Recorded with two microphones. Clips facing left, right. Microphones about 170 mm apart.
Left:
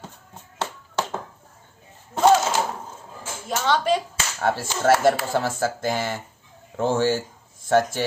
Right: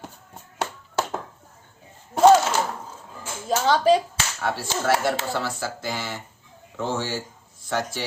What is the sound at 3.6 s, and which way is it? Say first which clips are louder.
Speech: right 3 dB; 35° right (ahead or behind).